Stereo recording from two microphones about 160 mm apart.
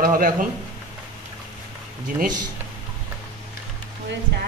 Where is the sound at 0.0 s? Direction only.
60° right (ahead or behind).